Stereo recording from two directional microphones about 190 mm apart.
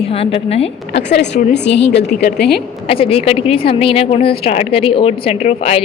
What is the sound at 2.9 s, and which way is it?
Speech, 30° left (ahead or behind).